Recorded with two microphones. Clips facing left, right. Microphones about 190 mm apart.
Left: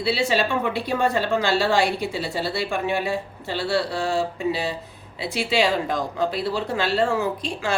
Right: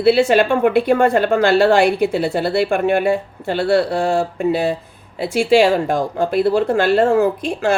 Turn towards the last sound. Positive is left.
turn(degrees=-55)  # may be behind; listen again after turning